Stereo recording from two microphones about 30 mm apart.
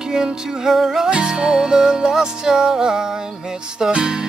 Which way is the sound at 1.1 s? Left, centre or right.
Right.